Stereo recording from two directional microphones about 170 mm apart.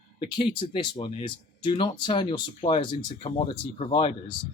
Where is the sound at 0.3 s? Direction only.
30° left (ahead or behind).